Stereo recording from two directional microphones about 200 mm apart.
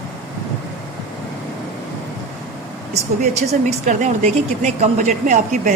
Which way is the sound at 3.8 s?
35° right (ahead or behind).